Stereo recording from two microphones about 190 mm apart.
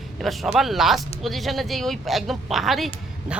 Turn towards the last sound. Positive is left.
turn(degrees=0)  # may be behind; listen again after turning